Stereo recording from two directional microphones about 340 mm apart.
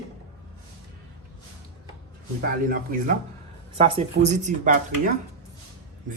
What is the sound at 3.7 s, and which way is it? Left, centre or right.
Speech, centre.